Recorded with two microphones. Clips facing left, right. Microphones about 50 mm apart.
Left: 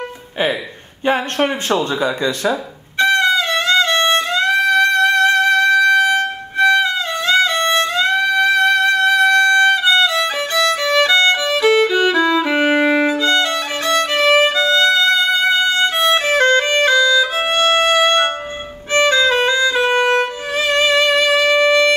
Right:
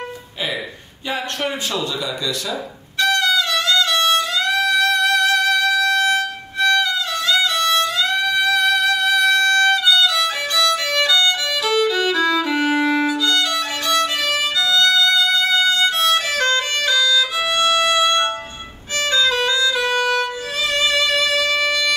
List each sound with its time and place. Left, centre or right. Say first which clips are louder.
1.0 s speech: left 7 dB; left
3.0 s violin: left 4 dB; left
5.1 s music: left 4 dB; left
6.6 s violin: left 4 dB; left
18.9 s music: left 5 dB; left